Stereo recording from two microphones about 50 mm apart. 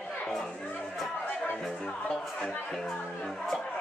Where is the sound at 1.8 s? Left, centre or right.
Centre.